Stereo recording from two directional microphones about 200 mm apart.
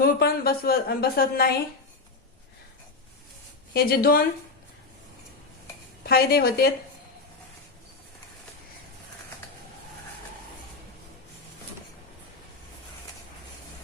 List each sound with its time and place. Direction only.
0.0 s a woman's voice: 50° left (ahead or behind)
3.7 s a woman's voice: 50° left (ahead or behind)
6.0 s a woman's voice: 50° left (ahead or behind)